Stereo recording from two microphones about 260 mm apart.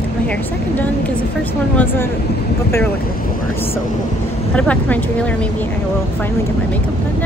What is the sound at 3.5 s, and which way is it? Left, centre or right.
Speech, centre.